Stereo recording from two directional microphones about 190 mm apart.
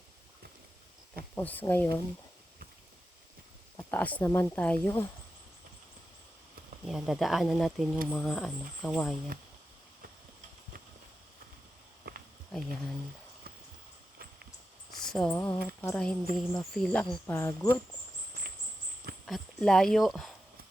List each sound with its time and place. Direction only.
1.4 s speech: 10° left (ahead or behind)
3.8 s speech: 10° left (ahead or behind)
6.8 s speech: centre (ahead or behind)
12.1 s walk: 55° right (ahead or behind)
12.5 s speech: 5° left (ahead or behind)
15.0 s a sound: 5° left (ahead or behind)
15.5 s speech: 5° left (ahead or behind)
19.2 s speech: centre (ahead or behind)